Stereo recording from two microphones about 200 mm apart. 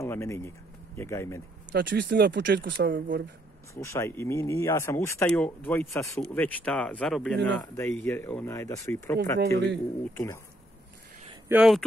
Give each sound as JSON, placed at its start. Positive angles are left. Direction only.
{"t": 0.0, "sound": "speech", "side_deg": 15}
{"t": 1.7, "sound": "speech", "side_deg": -60}
{"t": 3.7, "sound": "speech", "side_deg": 15}
{"t": 11.4, "sound": "speech", "side_deg": -5}